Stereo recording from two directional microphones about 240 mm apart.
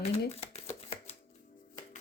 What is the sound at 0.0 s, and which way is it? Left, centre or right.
Shuffling cards, left.